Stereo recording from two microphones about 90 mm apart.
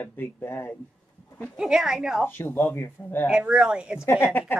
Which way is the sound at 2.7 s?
25° left (ahead or behind).